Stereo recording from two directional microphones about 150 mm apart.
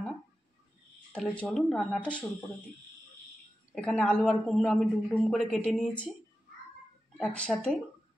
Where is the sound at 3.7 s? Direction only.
5° left (ahead or behind).